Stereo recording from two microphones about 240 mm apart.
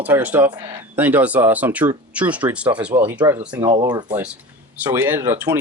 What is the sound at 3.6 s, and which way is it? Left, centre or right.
Speech, centre.